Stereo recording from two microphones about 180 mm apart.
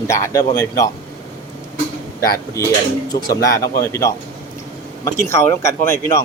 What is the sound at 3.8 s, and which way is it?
Speech, 15° left (ahead or behind).